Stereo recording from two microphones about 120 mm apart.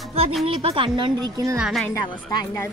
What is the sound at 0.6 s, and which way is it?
Speech, 50° right (ahead or behind).